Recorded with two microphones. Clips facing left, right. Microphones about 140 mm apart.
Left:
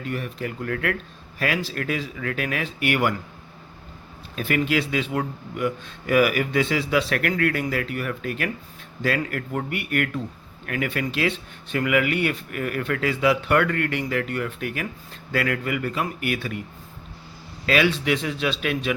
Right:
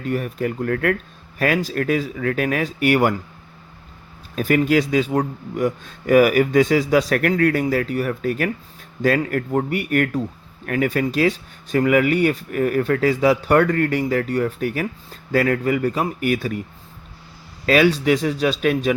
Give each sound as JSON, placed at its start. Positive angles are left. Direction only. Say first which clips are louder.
{"t": 0.0, "sound": "speech", "louder": "right 6 dB", "side_deg": -45}
{"t": 4.4, "sound": "speech", "louder": "right 6 dB", "side_deg": -40}
{"t": 17.7, "sound": "speech", "louder": "right 5 dB", "side_deg": -40}